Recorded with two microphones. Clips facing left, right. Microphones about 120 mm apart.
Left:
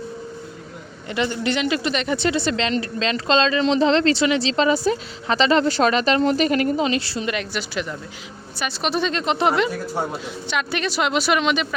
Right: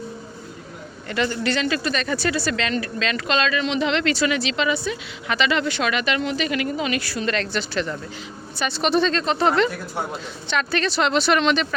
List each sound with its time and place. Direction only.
1.1 s speech: 20° left (ahead or behind)
7.3 s speech: 10° left (ahead or behind)